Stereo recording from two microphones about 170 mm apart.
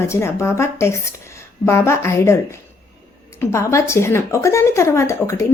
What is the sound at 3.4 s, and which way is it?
A woman's voice, 15° left (ahead or behind).